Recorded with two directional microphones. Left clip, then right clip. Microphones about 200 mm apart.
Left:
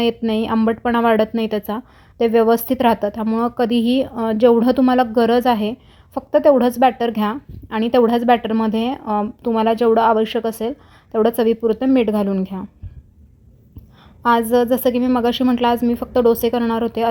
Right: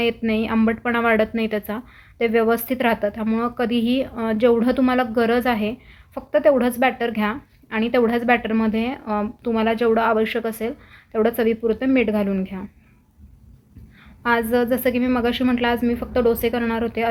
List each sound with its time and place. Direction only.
0.0 s a woman's voice: 45° left (ahead or behind)
14.3 s a woman's voice: 45° left (ahead or behind)